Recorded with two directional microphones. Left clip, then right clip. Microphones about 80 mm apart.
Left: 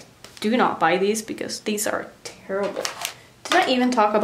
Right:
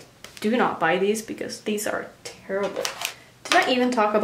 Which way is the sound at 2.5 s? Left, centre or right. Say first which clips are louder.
Left 1 dB; centre.